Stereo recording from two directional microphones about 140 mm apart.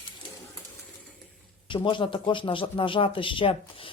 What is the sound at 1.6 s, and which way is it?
Speech, 35° left (ahead or behind).